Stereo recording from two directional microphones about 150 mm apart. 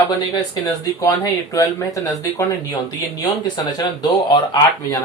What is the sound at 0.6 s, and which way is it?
Speech, 25° left (ahead or behind).